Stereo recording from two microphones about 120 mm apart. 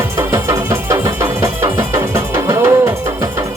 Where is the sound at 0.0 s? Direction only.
20° right (ahead or behind).